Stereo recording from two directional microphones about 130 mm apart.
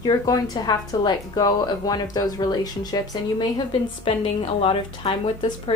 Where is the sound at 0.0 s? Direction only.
30° left (ahead or behind).